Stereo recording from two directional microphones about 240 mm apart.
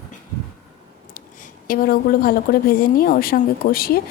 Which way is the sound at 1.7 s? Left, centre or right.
Left.